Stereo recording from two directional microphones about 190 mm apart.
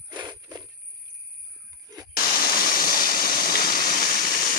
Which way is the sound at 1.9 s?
20° right (ahead or behind).